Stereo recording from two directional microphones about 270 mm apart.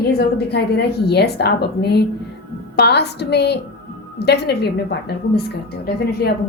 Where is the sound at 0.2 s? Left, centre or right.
Left.